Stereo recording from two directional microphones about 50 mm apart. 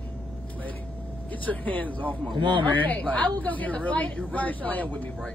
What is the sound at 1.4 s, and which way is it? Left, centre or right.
A woman's voice, left.